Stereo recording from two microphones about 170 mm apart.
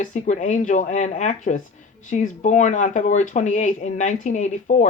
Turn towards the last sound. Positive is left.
turn(degrees=45)  # may be behind; listen again after turning